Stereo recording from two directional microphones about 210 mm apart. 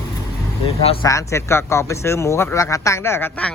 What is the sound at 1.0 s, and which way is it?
Speech, 15° left (ahead or behind).